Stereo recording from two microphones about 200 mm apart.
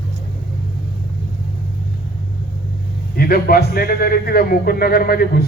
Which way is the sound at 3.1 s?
50° left (ahead or behind).